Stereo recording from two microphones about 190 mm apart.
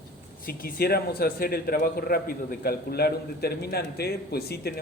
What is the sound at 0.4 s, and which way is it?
A man's voice, 50° left (ahead or behind).